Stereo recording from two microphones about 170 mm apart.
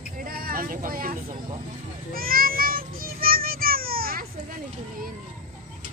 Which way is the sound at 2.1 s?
60° right (ahead or behind).